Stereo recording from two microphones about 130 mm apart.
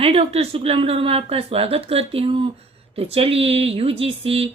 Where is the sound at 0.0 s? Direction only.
50° right (ahead or behind).